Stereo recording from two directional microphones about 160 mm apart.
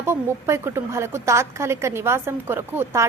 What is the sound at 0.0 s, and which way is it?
A woman's voice, 15° right (ahead or behind).